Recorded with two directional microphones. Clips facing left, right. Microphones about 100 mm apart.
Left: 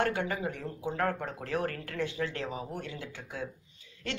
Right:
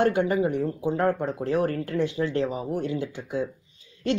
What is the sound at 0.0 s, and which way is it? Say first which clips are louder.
Speech: right 9 dB; 20° right (ahead or behind).